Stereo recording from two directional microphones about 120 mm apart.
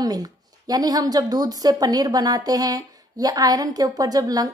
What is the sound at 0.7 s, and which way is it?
Speech, 30° right (ahead or behind).